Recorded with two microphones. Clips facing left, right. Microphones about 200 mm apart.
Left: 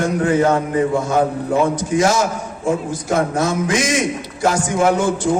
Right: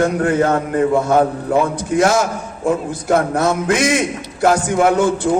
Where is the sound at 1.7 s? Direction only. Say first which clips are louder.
Right 1 dB; 60° right (ahead or behind).